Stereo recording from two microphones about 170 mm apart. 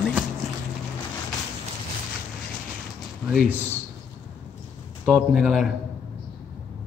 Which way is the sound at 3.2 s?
5° right (ahead or behind).